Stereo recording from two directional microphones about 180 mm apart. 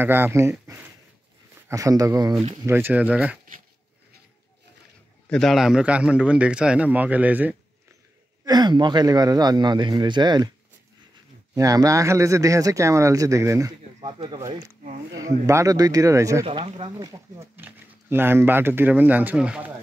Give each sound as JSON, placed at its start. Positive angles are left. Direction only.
{"t": 0.0, "sound": "speech", "side_deg": -10}
{"t": 5.3, "sound": "speech", "side_deg": 0}
{"t": 8.5, "sound": "speech", "side_deg": -25}
{"t": 11.5, "sound": "speech", "side_deg": -20}
{"t": 14.0, "sound": "speech", "side_deg": -30}
{"t": 16.4, "sound": "speech", "side_deg": -30}
{"t": 17.0, "sound": "speech", "side_deg": -15}